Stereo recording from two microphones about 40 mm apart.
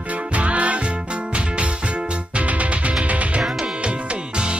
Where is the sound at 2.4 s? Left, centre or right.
Right.